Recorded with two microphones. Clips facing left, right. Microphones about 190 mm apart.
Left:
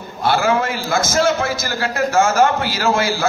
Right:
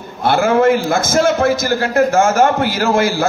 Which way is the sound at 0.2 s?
55° right (ahead or behind).